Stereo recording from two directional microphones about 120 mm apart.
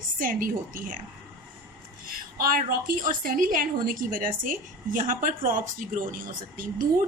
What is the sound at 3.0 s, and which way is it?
Speech, 90° right.